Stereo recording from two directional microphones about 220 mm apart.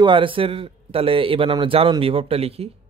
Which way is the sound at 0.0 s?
20° right (ahead or behind).